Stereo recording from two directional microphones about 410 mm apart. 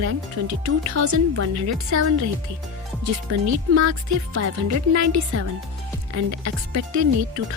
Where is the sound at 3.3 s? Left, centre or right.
Right.